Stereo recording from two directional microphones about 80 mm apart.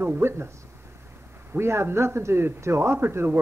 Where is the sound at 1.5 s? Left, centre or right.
Right.